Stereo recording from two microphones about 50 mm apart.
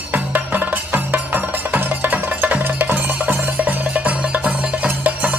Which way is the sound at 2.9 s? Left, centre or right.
Right.